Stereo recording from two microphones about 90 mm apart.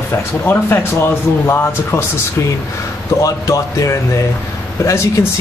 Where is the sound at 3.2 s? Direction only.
40° left (ahead or behind).